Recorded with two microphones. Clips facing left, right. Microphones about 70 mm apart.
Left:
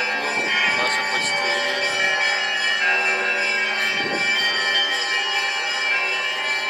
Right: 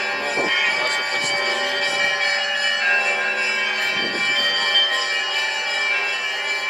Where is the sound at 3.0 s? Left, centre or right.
Centre.